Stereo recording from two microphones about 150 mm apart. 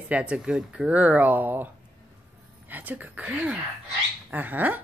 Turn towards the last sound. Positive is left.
turn(degrees=-10)  # may be behind; listen again after turning